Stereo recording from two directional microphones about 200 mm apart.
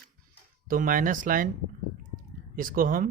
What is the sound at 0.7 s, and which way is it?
Speech, 45° right (ahead or behind).